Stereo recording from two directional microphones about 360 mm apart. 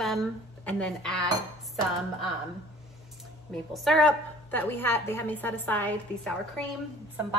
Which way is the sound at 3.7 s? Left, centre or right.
Centre.